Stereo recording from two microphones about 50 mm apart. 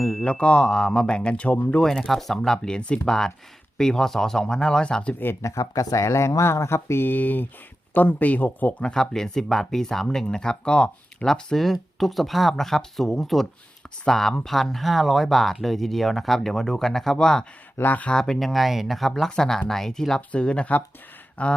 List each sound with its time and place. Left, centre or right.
0.0 s mantra: centre
0.3 s speech: left
1.8 s speech: centre
5.4 s speech: left
7.0 s speech: left
8.8 s speech: centre
11.3 s speech: centre
17.7 s speech: left
18.1 s speech: centre
18.3 s speech: centre; by 21.5 s left